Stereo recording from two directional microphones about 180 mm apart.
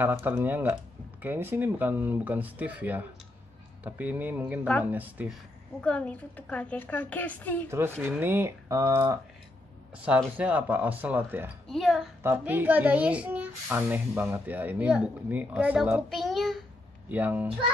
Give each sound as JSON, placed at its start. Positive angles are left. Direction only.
{"t": 0.0, "sound": "speech", "side_deg": -10}
{"t": 5.8, "sound": "a woman's voice", "side_deg": 5}
{"t": 8.0, "sound": "speech", "side_deg": -10}
{"t": 11.6, "sound": "speech", "side_deg": 0}
{"t": 12.2, "sound": "speech", "side_deg": -10}